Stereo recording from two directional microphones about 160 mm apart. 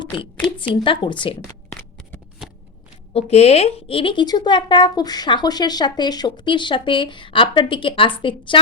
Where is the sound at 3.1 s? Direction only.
40° left (ahead or behind).